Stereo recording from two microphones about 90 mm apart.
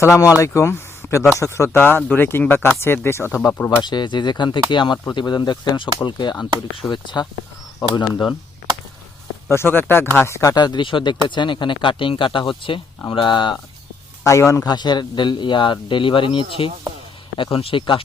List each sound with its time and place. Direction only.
0.0 s speech: 35° left (ahead or behind)
3.8 s speech: 55° left (ahead or behind)
9.5 s speech: 25° left (ahead or behind)
10.5 s speech: 50° left (ahead or behind); by 12.8 s 70° left (ahead or behind)
13.1 s speech: 60° left (ahead or behind)
14.3 s speech: 35° left (ahead or behind)
14.6 s speech: 50° left (ahead or behind); by 18.0 s 75° left (ahead or behind)